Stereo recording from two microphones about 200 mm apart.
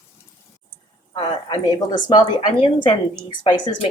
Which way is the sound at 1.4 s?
20° left (ahead or behind).